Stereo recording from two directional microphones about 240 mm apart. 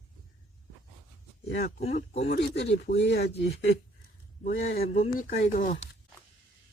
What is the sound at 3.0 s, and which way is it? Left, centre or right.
Speech, left.